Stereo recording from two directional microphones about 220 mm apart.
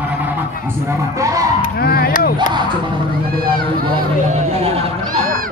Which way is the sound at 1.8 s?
45° left (ahead or behind).